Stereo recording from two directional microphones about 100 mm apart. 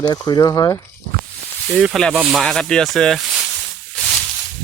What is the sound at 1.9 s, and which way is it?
Speech, centre (ahead or behind).